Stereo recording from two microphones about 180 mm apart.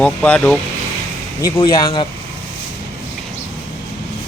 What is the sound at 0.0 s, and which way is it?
Speech, 10° left (ahead or behind).